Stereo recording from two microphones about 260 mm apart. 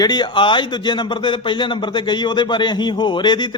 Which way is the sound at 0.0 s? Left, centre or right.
Centre.